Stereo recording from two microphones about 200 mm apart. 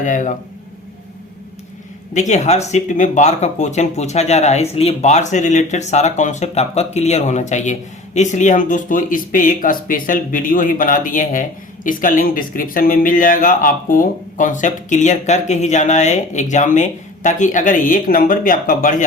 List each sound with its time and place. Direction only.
0.0 s speech: 40° left (ahead or behind)
2.1 s speech: 35° left (ahead or behind)